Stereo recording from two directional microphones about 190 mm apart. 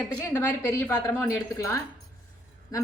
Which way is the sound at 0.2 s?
10° left (ahead or behind).